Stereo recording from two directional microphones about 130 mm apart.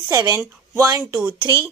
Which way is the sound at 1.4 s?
35° right (ahead or behind).